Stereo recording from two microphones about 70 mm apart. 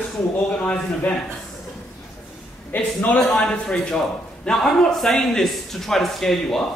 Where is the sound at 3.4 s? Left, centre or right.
Centre.